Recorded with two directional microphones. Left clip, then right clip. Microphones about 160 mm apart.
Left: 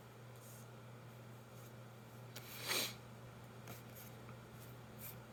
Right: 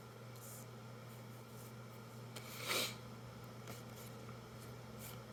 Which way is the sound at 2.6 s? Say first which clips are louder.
Right 1 dB; 10° left (ahead or behind).